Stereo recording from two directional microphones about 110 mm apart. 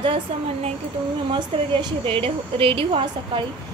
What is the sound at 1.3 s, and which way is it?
Speech, 50° right (ahead or behind).